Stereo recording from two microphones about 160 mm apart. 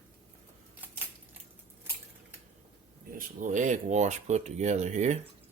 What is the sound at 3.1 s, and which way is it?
Speech, 55° right (ahead or behind).